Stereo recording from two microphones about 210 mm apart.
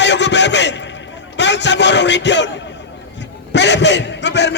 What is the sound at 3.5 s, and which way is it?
A man's voice, 55° left (ahead or behind).